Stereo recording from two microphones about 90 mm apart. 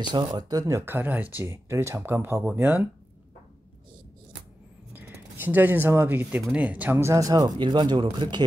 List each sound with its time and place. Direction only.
0.0 s speech: 50° right (ahead or behind)
0.8 s speech: 20° right (ahead or behind)
1.4 s speech: 30° right (ahead or behind)
4.9 s speech: 20° right (ahead or behind)
7.0 s speech: 35° right (ahead or behind)
7.5 s speech: 55° right (ahead or behind)